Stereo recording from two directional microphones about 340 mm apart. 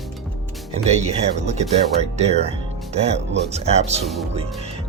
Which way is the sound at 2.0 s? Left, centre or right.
Centre.